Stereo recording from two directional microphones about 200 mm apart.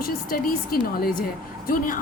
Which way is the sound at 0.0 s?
45° left (ahead or behind).